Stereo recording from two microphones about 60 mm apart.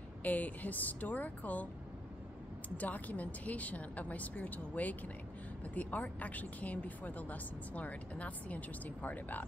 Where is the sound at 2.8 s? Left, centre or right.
Left.